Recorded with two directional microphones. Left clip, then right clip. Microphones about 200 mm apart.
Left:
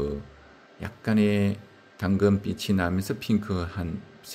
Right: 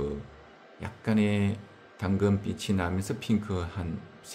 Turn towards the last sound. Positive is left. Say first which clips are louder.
# left 2 dB
turn(degrees=25)  # may be behind; listen again after turning